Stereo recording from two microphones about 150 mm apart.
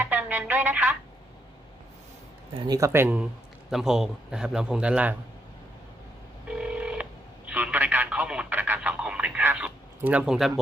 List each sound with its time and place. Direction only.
0.0 s speech: 10° right (ahead or behind)
2.6 s a man's voice: 25° right (ahead or behind); by 5.1 s 10° right (ahead or behind)
6.5 s telephone dialing: 5° right (ahead or behind)